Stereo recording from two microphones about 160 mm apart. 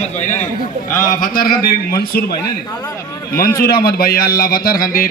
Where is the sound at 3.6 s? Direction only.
70° left (ahead or behind).